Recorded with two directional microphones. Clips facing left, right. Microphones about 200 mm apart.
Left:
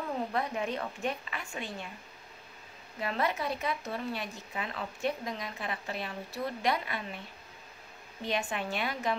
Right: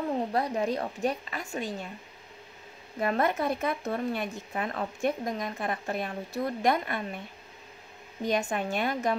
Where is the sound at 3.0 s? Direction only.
50° right (ahead or behind).